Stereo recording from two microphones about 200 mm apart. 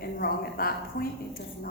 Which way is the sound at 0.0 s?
50° left (ahead or behind).